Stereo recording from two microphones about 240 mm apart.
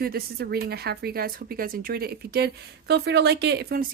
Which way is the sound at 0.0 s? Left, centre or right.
Right.